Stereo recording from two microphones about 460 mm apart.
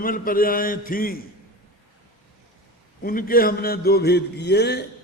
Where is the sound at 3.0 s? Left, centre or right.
Centre.